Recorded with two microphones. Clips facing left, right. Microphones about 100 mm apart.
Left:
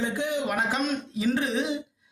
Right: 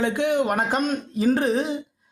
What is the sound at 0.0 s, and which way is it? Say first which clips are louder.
Speech: right 6 dB; 65° right (ahead or behind).